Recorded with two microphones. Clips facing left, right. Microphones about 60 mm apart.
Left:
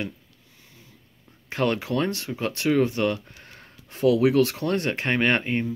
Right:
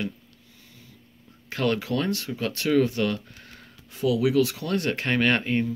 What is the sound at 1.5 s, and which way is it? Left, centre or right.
Speech, left.